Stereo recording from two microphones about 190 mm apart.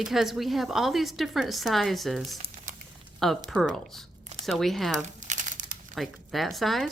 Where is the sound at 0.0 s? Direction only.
Centre (ahead or behind).